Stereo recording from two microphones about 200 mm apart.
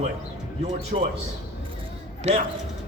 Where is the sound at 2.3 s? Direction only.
35° right (ahead or behind).